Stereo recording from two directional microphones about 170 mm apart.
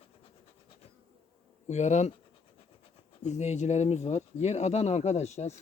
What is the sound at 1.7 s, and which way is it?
Speech, 45° left (ahead or behind).